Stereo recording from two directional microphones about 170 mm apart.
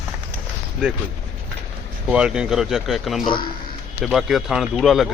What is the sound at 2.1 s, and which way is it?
Speech, 5° right (ahead or behind).